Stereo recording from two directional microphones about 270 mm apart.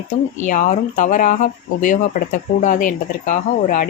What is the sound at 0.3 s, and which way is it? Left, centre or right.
Speech, left.